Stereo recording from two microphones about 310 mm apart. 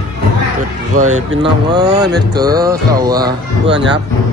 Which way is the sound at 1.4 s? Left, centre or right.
Centre.